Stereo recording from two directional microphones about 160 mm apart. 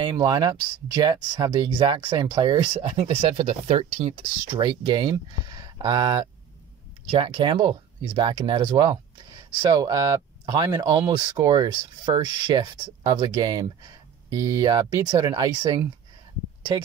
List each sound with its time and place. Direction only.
0.0 s speech: 25° right (ahead or behind)